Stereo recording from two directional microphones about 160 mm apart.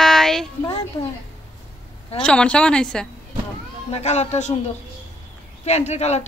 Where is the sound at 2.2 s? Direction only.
5° left (ahead or behind).